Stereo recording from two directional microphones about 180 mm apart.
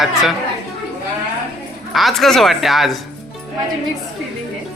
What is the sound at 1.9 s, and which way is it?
Speech, centre (ahead or behind).